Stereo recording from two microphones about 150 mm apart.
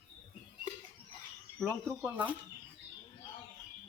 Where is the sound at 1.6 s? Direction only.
5° left (ahead or behind).